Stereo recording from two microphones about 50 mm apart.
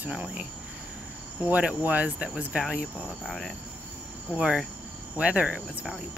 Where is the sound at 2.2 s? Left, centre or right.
Centre.